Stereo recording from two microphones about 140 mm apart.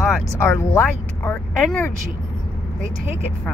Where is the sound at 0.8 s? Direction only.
10° left (ahead or behind).